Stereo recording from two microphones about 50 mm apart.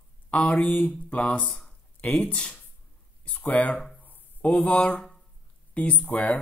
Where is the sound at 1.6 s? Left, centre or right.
Left.